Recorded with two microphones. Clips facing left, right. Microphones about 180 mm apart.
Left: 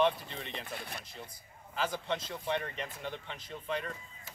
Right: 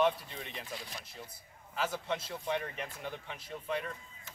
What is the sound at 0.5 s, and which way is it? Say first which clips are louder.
Speech: left 2 dB; 60° left (ahead or behind).